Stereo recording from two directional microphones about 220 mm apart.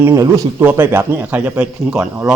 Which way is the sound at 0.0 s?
15° right (ahead or behind).